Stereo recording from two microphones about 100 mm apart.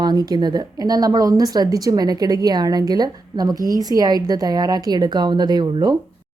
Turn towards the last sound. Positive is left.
turn(degrees=-40)  # may be behind; listen again after turning